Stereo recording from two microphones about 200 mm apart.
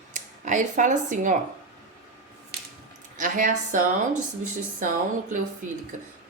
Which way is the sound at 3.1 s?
40° right (ahead or behind).